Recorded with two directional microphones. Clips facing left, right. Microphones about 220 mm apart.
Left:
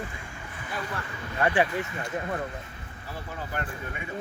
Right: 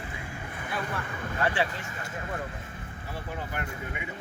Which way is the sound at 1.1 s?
50° right (ahead or behind).